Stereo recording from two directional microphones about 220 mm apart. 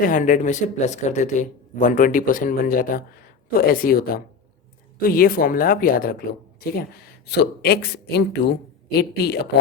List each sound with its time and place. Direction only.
0.0 s speech: 35° left (ahead or behind)
7.3 s speech: 50° left (ahead or behind)